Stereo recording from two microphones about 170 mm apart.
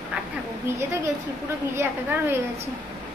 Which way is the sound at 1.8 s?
15° right (ahead or behind).